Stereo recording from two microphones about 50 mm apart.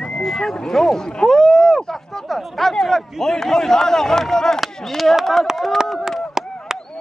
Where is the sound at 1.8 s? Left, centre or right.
Centre.